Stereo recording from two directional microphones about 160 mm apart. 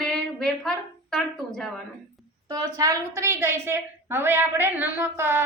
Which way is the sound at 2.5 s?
20° right (ahead or behind).